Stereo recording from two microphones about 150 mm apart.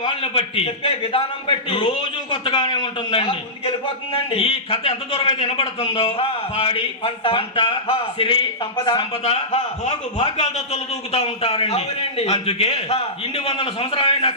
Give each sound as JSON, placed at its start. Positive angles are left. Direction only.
{"t": 0.0, "sound": "a man's voice", "side_deg": 35}